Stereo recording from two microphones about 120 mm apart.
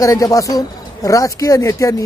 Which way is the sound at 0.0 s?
30° left (ahead or behind).